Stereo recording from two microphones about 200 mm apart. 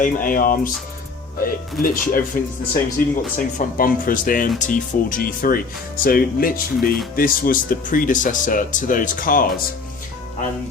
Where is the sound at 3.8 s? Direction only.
45° left (ahead or behind).